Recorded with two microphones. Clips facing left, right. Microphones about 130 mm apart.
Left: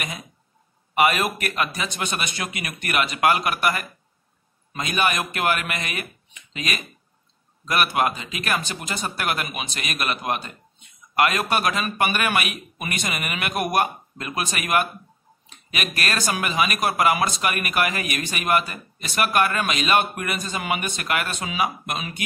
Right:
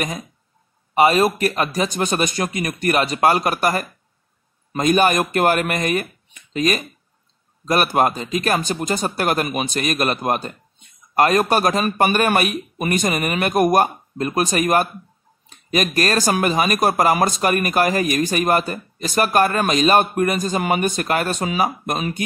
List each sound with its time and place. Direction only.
0.9 s a man's voice: 30° right (ahead or behind)